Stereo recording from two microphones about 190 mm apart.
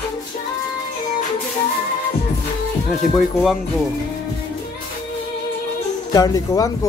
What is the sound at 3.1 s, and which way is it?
Speech, centre (ahead or behind).